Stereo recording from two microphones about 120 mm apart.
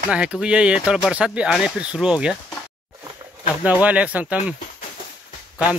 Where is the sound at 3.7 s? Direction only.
10° right (ahead or behind).